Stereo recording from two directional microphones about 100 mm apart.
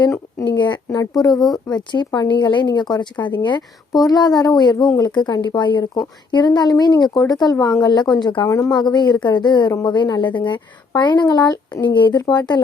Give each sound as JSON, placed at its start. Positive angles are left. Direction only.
{"t": 0.5, "sound": "a sound", "side_deg": 50}
{"t": 1.2, "sound": "a woman's voice", "side_deg": 40}
{"t": 8.4, "sound": "speech", "side_deg": 25}
{"t": 8.7, "sound": "a woman's voice", "side_deg": 45}